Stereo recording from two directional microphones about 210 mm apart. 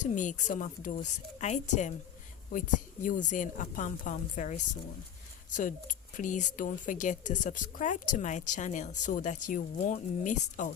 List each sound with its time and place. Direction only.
0.0 s a woman's voice: 35° left (ahead or behind)